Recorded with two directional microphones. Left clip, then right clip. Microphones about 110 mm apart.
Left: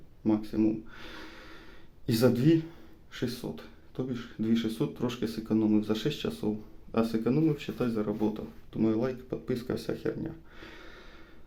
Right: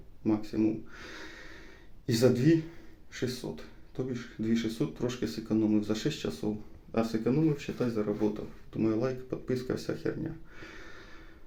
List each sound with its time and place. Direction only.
0.3 s speech: 30° left (ahead or behind)